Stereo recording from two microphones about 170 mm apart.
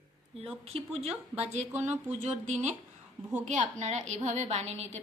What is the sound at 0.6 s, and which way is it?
A woman's voice, 35° right (ahead or behind).